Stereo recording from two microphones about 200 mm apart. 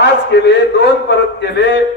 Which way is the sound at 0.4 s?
60° left (ahead or behind).